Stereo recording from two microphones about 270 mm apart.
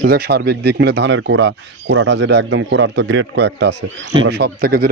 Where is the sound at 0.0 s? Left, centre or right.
Right.